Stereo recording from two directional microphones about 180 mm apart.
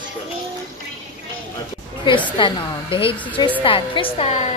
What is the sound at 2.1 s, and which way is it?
A woman's voice, 25° left (ahead or behind).